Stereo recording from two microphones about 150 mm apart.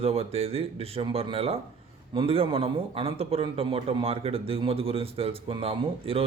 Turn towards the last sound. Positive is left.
turn(degrees=-40)  # may be behind; listen again after turning